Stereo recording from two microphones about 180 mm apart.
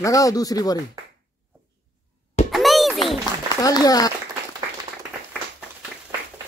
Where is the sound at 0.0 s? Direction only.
20° left (ahead or behind).